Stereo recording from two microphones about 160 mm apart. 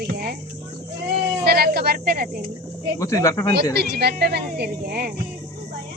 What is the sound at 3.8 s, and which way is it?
A woman's voice, 80° right.